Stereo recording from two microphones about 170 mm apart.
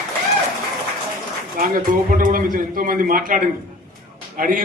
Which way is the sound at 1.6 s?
55° right (ahead or behind).